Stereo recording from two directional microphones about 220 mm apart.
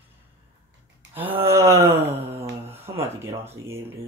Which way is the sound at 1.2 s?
10° right (ahead or behind).